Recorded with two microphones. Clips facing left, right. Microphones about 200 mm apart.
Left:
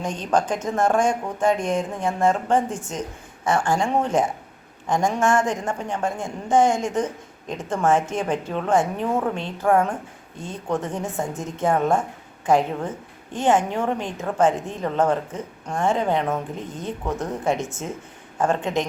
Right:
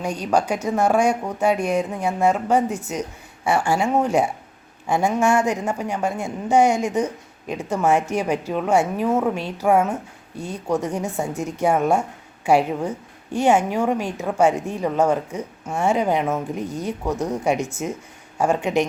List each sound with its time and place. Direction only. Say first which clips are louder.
0.0 s speech: right 1 dB; 10° right (ahead or behind)
10.3 s speech: right 4 dB; 20° left (ahead or behind)
10.9 s speech: right 2 dB; 10° right (ahead or behind)
16.6 s speech: right 4 dB; 25° left (ahead or behind)
17.0 s speech: right 2 dB; 10° right (ahead or behind)
17.6 s speech: right 3 dB; 25° left (ahead or behind)
18.3 s speech: right 3 dB; 10° right (ahead or behind)